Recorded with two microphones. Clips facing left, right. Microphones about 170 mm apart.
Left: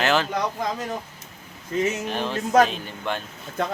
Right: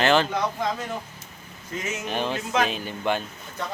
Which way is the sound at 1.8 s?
35° left (ahead or behind).